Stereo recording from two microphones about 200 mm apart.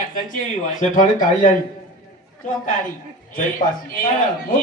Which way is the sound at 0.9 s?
40° left (ahead or behind).